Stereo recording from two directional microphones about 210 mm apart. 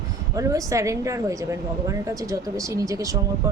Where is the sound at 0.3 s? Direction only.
15° right (ahead or behind).